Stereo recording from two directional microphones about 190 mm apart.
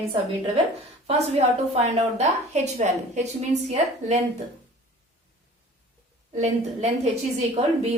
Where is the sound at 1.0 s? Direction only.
35° right (ahead or behind).